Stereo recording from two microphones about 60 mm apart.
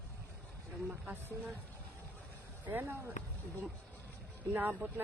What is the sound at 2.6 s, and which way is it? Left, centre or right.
Speech, right.